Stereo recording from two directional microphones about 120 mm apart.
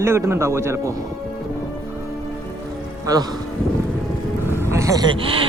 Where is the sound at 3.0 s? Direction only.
30° right (ahead or behind).